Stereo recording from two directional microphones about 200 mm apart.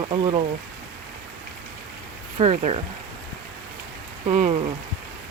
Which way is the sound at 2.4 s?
30° right (ahead or behind).